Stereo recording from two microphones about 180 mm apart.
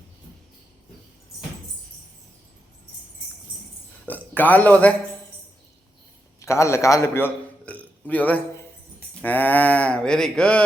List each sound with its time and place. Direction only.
4.0 s a man's voice: 10° left (ahead or behind)
6.4 s a man's voice: 15° left (ahead or behind)